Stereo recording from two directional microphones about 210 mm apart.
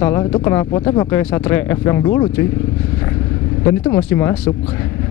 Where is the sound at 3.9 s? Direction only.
10° left (ahead or behind).